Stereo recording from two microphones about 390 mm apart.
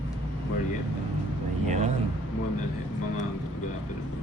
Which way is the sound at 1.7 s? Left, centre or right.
Centre.